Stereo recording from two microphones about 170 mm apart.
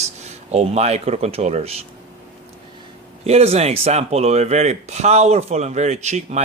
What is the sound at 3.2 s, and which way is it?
Speech, 40° right (ahead or behind).